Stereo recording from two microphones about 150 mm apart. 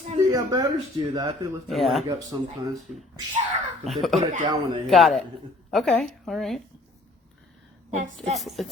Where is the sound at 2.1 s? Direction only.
25° right (ahead or behind).